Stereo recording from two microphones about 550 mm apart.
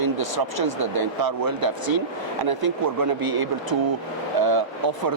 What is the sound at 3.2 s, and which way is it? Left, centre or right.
Speech, right.